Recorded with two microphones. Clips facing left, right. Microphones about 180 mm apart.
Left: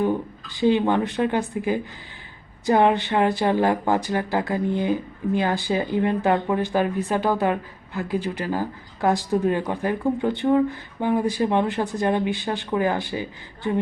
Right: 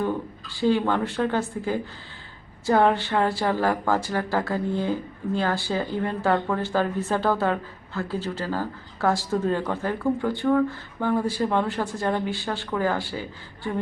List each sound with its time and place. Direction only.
0.0 s speech: 20° left (ahead or behind)